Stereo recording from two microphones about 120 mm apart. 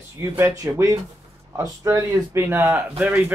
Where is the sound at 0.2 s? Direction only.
25° right (ahead or behind).